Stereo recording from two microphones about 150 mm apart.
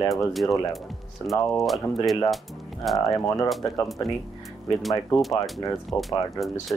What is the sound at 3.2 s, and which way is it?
Speech, 20° left (ahead or behind).